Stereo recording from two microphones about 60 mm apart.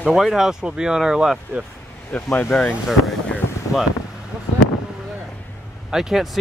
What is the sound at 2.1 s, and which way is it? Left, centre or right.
Speech, centre.